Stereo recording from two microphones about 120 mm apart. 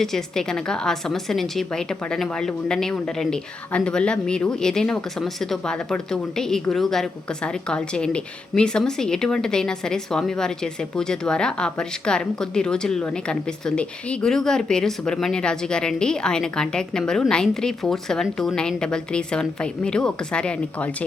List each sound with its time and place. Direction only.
0.0 s a woman's voice: 5° left (ahead or behind)